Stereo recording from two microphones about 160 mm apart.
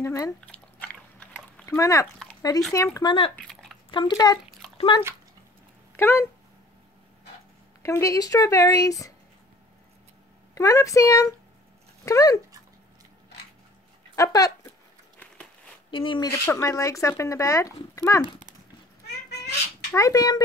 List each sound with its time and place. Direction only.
0.0 s speech: 20° left (ahead or behind)
1.7 s speech: 20° left (ahead or behind)
5.9 s speech: 15° left (ahead or behind)
7.8 s speech: 20° left (ahead or behind)
10.5 s speech: 20° left (ahead or behind)
12.0 s dog: 20° left (ahead or behind)
14.1 s speech: 20° left (ahead or behind)
15.9 s speech: 30° left (ahead or behind)
16.4 s speech: 20° left (ahead or behind)
19.9 s speech: 20° left (ahead or behind)